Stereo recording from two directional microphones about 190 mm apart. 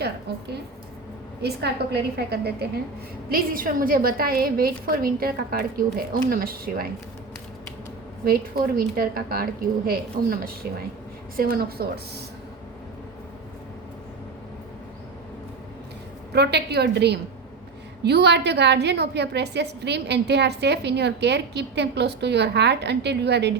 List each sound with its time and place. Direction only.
1.4 s a woman's voice: 60° right (ahead or behind)
8.2 s a woman's voice: 50° right (ahead or behind)
16.3 s a woman's voice: 60° right (ahead or behind)